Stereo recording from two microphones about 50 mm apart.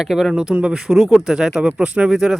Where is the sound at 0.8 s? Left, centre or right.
Centre.